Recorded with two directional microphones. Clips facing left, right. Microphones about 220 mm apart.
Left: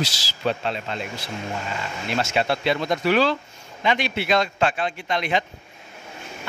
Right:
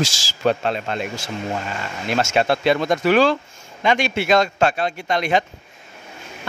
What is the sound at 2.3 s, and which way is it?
Speech, 45° right (ahead or behind).